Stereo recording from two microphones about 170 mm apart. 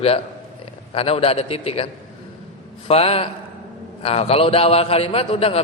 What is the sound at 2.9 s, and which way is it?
A man's voice, 35° left (ahead or behind).